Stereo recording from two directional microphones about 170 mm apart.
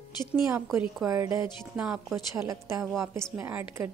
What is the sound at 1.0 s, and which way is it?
Speech, 15° right (ahead or behind).